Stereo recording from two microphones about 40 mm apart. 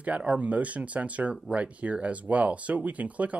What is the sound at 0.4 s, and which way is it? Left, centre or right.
Speech, right.